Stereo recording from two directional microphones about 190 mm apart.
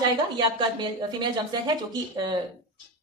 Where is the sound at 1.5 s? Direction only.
20° right (ahead or behind).